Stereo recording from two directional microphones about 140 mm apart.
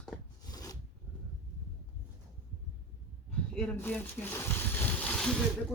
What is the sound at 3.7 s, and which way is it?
Speech, 15° left (ahead or behind).